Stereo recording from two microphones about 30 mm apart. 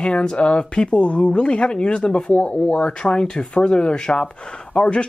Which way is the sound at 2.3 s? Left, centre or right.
Left.